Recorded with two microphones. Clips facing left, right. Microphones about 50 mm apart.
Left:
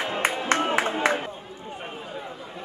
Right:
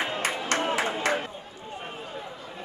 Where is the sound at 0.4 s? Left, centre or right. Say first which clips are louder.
Left 3 dB; left.